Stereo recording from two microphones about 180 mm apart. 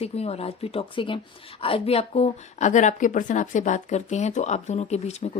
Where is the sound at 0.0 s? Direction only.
35° left (ahead or behind).